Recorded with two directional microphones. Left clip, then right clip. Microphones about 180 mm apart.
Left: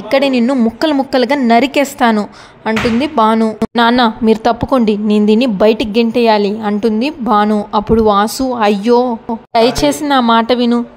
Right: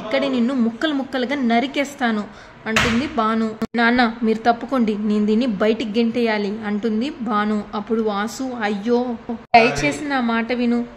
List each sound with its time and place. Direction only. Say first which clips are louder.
0.1 s a woman's voice: left 9 dB; 40° left (ahead or behind)